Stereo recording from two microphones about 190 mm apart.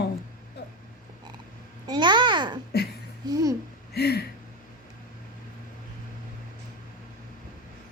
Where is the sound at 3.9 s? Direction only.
55° left (ahead or behind).